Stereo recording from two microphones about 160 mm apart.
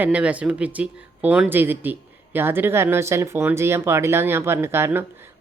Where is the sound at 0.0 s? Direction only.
10° right (ahead or behind).